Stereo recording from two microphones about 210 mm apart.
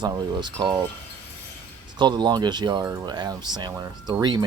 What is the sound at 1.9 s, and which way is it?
Speech, 20° right (ahead or behind).